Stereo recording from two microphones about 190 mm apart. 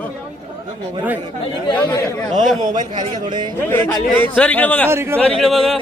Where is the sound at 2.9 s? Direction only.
25° right (ahead or behind).